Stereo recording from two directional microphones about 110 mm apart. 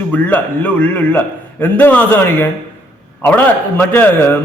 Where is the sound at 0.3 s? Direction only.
10° left (ahead or behind).